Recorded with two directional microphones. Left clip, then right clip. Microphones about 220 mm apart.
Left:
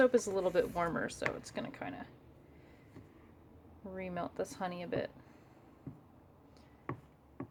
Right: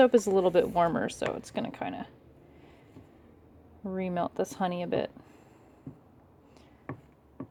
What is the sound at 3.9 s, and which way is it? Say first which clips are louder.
Speech: right 9 dB; 35° right (ahead or behind).